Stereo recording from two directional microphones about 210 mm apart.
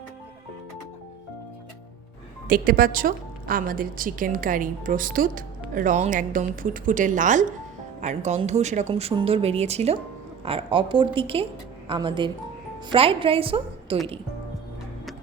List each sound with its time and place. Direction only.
2.5 s a woman's voice: 45° right (ahead or behind); by 14.0 s 25° right (ahead or behind)